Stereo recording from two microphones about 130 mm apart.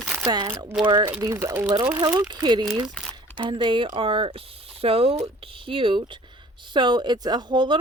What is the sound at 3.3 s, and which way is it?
Speech, 40° right (ahead or behind).